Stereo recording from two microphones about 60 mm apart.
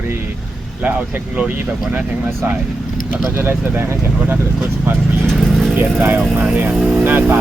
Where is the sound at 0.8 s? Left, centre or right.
Right.